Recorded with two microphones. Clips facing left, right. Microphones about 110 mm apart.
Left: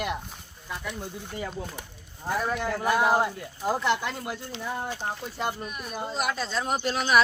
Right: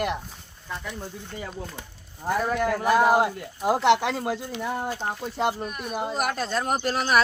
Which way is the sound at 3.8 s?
85° right.